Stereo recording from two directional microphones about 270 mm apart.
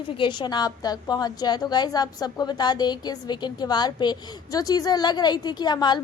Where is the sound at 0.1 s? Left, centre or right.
Centre.